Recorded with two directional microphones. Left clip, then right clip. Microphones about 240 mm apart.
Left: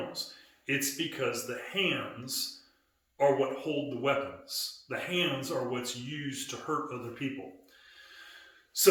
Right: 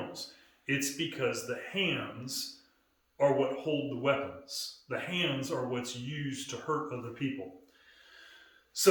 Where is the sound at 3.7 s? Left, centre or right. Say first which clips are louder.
Even; centre.